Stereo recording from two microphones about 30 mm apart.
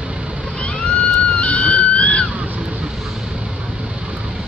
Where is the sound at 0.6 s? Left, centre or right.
Left.